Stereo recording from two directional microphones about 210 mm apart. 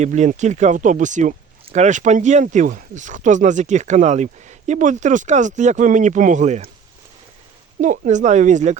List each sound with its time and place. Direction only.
0.0 s speech: 35° right (ahead or behind)
7.8 s speech: 35° right (ahead or behind)